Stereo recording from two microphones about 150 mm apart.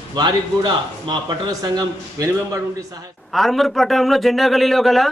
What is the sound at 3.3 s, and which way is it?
A man's voice, centre (ahead or behind).